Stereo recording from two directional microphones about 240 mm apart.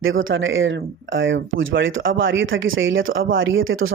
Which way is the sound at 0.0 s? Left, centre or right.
Right.